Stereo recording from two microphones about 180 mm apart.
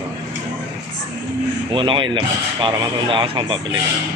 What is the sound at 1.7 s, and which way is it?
Speech, 25° right (ahead or behind).